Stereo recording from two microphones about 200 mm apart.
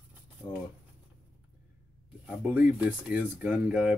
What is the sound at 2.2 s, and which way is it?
Speech, 5° right (ahead or behind).